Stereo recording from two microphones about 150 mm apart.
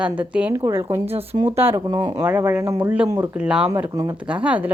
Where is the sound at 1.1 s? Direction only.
40° right (ahead or behind).